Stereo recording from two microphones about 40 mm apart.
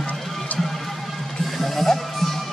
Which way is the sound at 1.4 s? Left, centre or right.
Centre.